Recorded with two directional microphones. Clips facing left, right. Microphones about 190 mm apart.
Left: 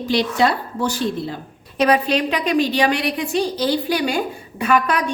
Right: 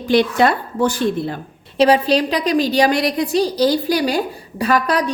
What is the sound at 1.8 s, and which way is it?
A woman's voice, 30° right (ahead or behind).